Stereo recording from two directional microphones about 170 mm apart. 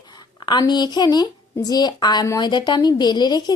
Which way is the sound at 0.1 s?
25° left (ahead or behind).